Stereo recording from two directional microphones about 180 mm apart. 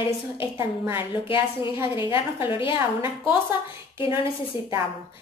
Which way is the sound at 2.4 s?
30° left (ahead or behind).